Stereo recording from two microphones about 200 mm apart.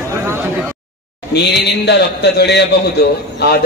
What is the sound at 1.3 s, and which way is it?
A man's voice, 55° left (ahead or behind).